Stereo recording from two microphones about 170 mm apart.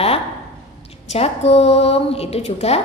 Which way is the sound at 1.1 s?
35° left (ahead or behind).